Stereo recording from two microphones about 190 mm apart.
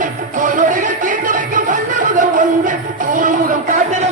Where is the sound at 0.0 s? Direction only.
45° right (ahead or behind).